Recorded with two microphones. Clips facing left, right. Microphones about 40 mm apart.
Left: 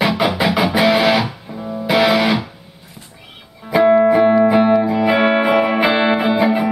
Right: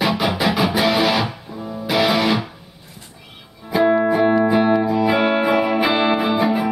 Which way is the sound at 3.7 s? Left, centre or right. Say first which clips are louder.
Left 4 dB; centre.